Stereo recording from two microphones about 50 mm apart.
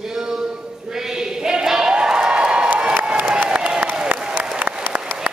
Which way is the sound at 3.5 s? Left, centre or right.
Right.